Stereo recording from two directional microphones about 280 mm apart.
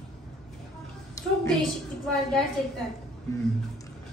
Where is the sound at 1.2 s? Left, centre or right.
Centre.